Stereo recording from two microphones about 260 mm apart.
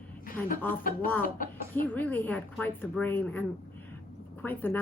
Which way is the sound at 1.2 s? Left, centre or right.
Left.